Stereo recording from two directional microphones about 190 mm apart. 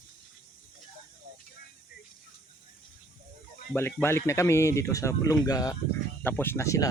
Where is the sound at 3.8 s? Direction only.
10° left (ahead or behind).